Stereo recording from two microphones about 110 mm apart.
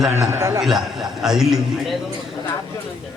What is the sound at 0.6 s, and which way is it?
Speech, 5° right (ahead or behind).